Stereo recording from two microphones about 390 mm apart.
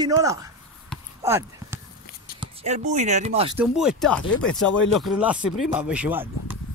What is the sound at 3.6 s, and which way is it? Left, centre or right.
Speech, centre.